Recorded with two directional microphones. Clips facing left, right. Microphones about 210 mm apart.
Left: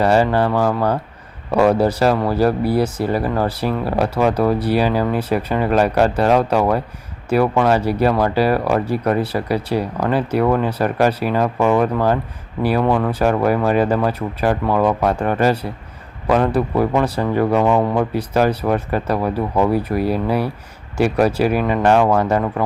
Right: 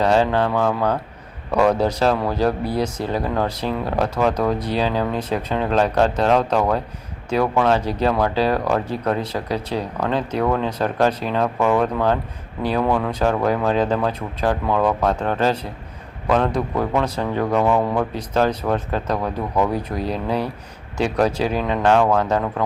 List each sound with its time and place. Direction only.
0.0 s a man's voice: 10° left (ahead or behind)